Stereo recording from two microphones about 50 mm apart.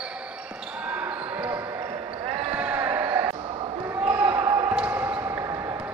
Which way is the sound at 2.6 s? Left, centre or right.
Right.